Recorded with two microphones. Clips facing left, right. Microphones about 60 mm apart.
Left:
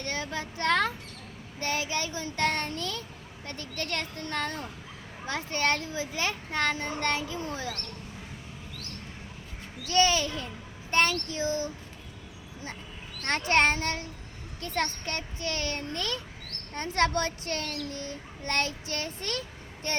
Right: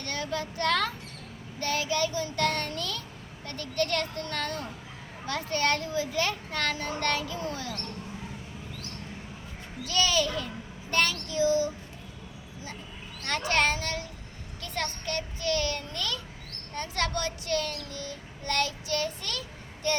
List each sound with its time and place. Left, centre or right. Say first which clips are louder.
0.0 s a sound: right 1 dB; left
1.5 s child singing: right 2 dB; left
3.4 s a child's voice: right 6 dB; left
9.9 s a child's voice: left 2 dB; left
13.5 s a child's voice: left 2 dB; left